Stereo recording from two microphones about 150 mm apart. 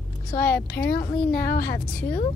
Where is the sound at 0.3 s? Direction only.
90° left.